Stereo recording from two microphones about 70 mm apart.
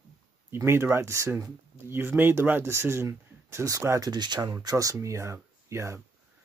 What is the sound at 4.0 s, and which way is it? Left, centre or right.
Speech, right.